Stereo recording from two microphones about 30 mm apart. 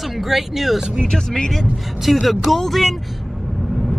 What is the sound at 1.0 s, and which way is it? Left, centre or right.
Speech, centre.